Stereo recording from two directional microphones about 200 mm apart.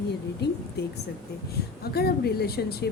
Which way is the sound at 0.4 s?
55° left (ahead or behind).